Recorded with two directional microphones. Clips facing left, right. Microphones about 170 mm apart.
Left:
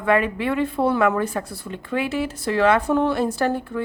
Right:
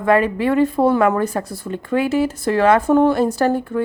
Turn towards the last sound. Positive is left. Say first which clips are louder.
# right 5 dB
turn(degrees=-40)  # may be behind; listen again after turning